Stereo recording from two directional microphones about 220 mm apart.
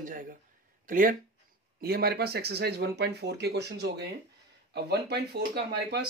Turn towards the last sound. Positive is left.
turn(degrees=-50)  # may be behind; listen again after turning